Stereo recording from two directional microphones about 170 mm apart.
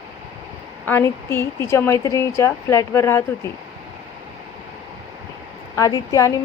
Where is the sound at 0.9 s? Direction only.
15° left (ahead or behind).